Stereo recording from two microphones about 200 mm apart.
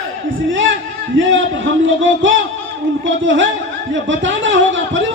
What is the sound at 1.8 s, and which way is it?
A man's voice, 70° right (ahead or behind).